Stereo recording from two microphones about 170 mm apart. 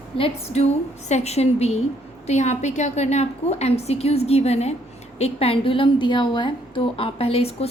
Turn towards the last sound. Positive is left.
turn(degrees=35)  # may be behind; listen again after turning